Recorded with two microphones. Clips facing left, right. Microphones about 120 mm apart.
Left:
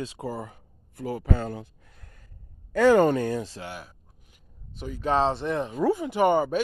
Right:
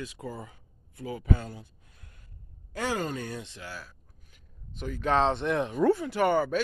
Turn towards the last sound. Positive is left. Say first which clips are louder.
# left 3 dB
turn(degrees=15)  # may be behind; listen again after turning